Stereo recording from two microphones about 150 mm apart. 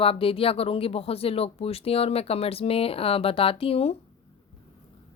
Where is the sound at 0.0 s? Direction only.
40° left (ahead or behind).